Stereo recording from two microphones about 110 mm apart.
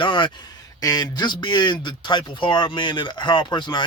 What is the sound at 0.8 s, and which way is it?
Speech, 35° left (ahead or behind).